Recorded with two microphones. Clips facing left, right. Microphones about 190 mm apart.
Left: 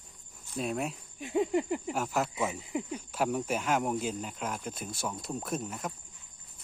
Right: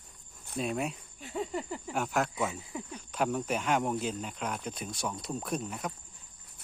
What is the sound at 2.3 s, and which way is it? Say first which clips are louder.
Speech: left 2 dB; 15° left (ahead or behind).